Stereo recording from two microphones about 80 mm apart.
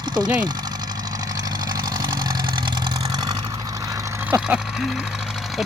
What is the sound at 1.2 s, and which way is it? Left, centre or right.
Vehicle, right.